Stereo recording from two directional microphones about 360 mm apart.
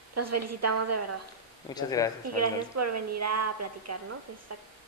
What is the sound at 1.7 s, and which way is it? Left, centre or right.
Speech, centre.